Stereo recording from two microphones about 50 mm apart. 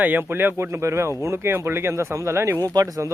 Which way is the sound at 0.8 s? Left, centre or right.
Right.